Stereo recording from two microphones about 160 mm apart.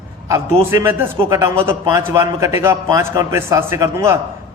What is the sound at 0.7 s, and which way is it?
A man's voice, 15° right (ahead or behind).